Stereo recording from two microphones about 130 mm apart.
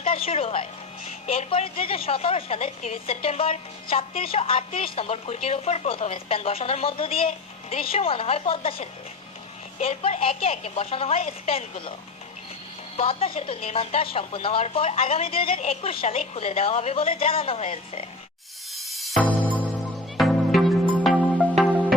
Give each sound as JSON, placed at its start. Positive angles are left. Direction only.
{"t": 0.0, "sound": "a woman's voice", "side_deg": 45}
{"t": 13.0, "sound": "a woman's voice", "side_deg": 45}
{"t": 18.8, "sound": "music", "side_deg": 0}